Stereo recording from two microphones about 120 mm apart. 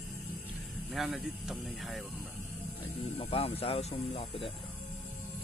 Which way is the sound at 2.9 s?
55° left (ahead or behind).